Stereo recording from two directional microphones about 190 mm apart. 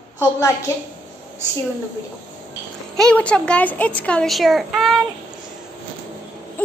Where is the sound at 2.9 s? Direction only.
5° left (ahead or behind).